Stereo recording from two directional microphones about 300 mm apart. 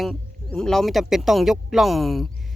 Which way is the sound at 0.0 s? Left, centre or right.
Centre.